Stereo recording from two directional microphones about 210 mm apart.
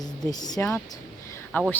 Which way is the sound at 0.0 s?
20° left (ahead or behind).